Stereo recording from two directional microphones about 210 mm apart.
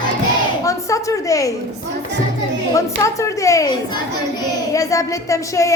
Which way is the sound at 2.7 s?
15° left (ahead or behind).